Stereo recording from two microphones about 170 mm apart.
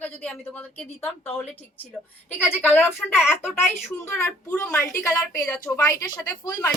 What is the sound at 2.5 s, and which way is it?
A woman's voice, 15° left (ahead or behind).